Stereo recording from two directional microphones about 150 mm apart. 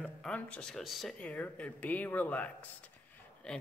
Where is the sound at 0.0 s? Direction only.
5° left (ahead or behind).